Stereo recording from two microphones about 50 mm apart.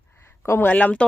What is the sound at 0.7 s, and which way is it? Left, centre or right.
Speech, left.